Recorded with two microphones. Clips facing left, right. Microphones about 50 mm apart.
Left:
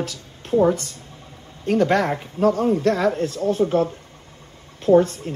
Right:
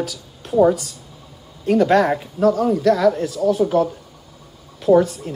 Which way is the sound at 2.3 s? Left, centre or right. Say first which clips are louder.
Right 1 dB; left.